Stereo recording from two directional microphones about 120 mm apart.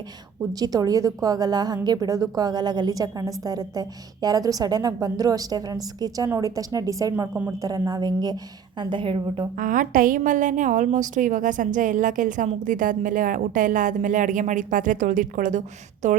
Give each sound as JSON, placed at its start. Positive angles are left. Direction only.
{"t": 0.6, "sound": "a woman's voice", "side_deg": -30}
{"t": 10.2, "sound": "a woman's voice", "side_deg": -90}